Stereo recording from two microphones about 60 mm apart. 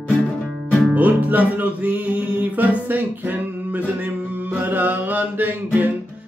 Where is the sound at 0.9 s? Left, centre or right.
Right.